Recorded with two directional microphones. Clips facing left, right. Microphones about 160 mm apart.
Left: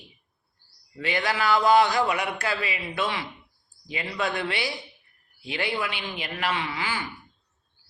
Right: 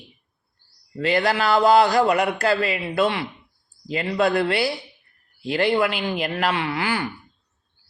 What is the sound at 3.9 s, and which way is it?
A man's voice, 40° right (ahead or behind).